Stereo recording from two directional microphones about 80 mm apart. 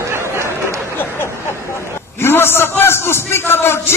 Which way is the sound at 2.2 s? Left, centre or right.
Left.